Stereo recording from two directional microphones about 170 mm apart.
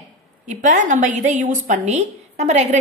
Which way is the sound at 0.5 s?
45° right (ahead or behind).